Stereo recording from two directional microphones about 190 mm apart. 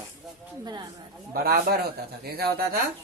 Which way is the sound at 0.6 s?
20° right (ahead or behind).